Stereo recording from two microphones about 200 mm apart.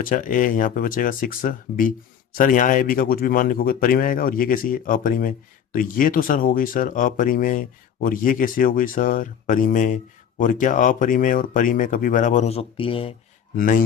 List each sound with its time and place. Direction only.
0.0 s speech: 40° left (ahead or behind)
13.6 s speech: 45° left (ahead or behind)